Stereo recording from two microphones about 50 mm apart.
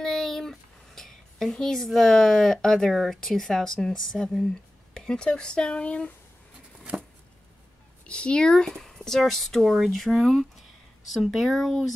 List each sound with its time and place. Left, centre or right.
0.0 s a sound: centre
2.9 s speech: centre
3.2 s speech: centre; by 6.1 s left
8.1 s speech: centre
8.6 s speech: centre